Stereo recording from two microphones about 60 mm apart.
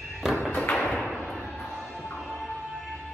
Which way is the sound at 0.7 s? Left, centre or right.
Centre.